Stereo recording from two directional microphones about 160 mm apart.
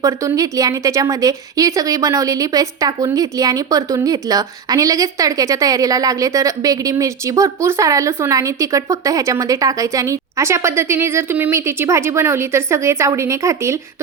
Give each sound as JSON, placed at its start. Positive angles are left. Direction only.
{"t": 0.0, "sound": "a woman's voice", "side_deg": -20}